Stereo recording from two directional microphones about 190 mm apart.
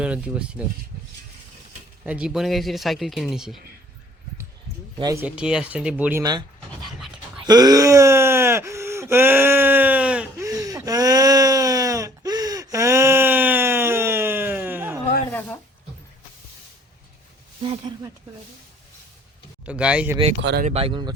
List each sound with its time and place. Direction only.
0.0 s speech: 5° right (ahead or behind)
2.0 s speech: 5° right (ahead or behind)
4.9 s speech: 20° right (ahead or behind)
5.2 s speech: 5° right (ahead or behind)
7.4 s a sound: 20° right (ahead or behind)
10.4 s a sound: 20° right (ahead or behind)
15.3 s a sound: 10° left (ahead or behind)
17.6 s speech: 30° right (ahead or behind)
19.6 s speech: 5° right (ahead or behind)
20.4 s speech: 65° right (ahead or behind)
20.7 s speech: 30° right (ahead or behind)